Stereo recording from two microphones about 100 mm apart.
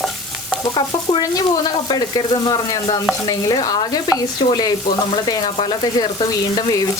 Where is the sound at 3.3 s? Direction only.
35° left (ahead or behind).